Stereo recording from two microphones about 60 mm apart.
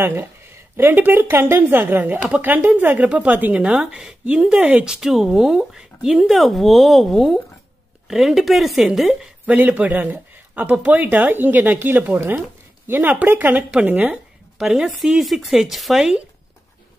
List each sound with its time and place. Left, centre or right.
0.0 s speech: right
3.1 s speech: right
3.8 s a woman's voice: centre
9.5 s speech: right
14.1 s a woman's voice: centre